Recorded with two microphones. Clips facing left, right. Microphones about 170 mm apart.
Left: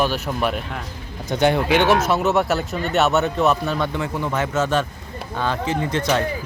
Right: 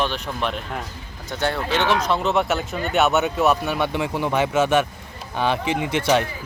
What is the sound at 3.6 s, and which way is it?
Speech, 20° right (ahead or behind).